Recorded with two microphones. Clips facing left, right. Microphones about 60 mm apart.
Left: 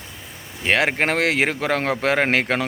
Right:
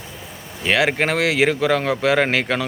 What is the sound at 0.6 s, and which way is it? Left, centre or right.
A man's voice, left.